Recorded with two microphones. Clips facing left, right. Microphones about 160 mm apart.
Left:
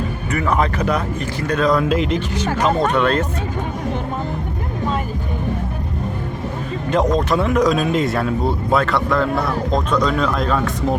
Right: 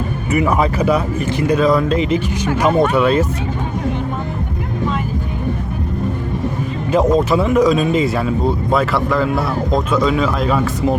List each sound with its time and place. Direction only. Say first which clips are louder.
0.3 s speech: right 4 dB; 10° right (ahead or behind)
6.9 s speech: right 3 dB; 5° right (ahead or behind)